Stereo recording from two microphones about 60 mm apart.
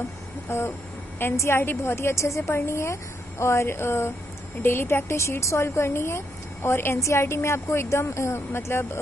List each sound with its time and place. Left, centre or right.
0.5 s speech: left